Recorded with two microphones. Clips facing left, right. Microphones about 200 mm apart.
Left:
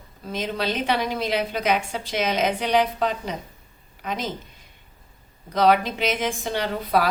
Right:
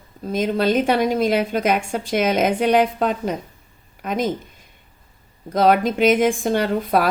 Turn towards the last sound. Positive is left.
turn(degrees=-50)  # may be behind; listen again after turning